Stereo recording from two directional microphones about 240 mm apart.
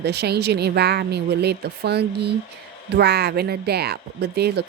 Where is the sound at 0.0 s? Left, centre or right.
Right.